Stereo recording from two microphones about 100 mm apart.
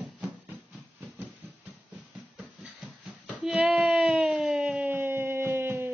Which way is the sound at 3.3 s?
5° right (ahead or behind).